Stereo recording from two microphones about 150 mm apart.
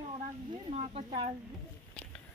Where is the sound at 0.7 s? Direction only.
45° right (ahead or behind).